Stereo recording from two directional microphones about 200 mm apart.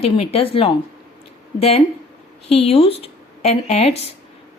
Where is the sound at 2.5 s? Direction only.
30° left (ahead or behind).